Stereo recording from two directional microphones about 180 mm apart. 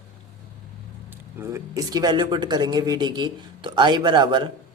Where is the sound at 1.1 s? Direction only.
15° right (ahead or behind).